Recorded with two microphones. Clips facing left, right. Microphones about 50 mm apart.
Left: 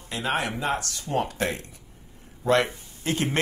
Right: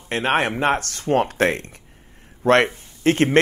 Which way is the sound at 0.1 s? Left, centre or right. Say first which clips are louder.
Right 7 dB; right.